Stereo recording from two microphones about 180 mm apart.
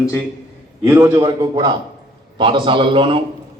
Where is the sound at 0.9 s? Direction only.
15° right (ahead or behind).